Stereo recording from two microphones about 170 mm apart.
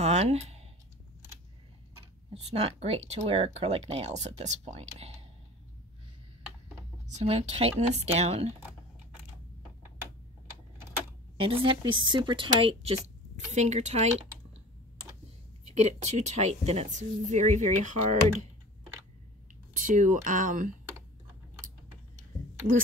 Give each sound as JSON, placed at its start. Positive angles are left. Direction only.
{"t": 0.0, "sound": "speech", "side_deg": -40}
{"t": 2.3, "sound": "speech", "side_deg": -40}
{"t": 7.2, "sound": "speech", "side_deg": -40}
{"t": 11.3, "sound": "speech", "side_deg": -35}
{"t": 15.7, "sound": "speech", "side_deg": -45}
{"t": 19.7, "sound": "speech", "side_deg": -50}